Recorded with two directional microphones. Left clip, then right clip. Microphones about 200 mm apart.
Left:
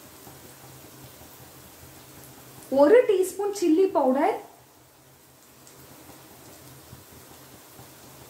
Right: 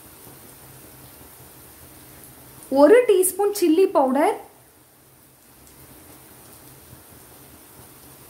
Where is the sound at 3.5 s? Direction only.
60° right (ahead or behind).